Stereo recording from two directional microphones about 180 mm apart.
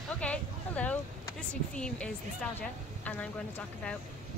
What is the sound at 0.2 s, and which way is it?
A woman's voice, 5° left (ahead or behind).